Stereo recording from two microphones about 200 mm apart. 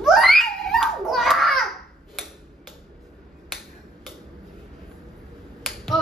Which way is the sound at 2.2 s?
Centre (ahead or behind).